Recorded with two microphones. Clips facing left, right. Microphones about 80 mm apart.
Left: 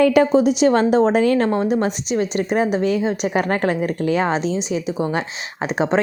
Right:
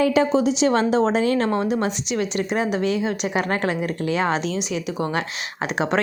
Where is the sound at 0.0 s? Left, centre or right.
Left.